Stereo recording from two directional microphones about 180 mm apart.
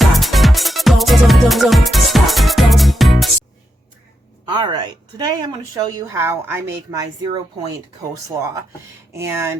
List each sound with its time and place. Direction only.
0.0 s music: centre (ahead or behind)
4.4 s a woman's voice: 25° right (ahead or behind)